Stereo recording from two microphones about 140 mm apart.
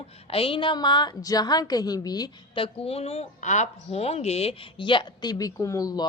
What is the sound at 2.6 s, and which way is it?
Speech, 45° left (ahead or behind).